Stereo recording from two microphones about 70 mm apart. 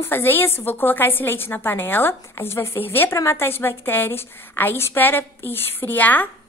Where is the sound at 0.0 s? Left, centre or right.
Left.